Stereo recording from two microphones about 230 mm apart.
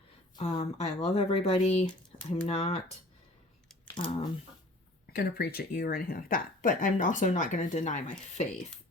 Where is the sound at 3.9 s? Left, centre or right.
Left.